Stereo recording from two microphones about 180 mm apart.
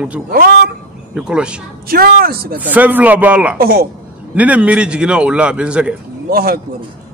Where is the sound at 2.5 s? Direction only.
10° right (ahead or behind).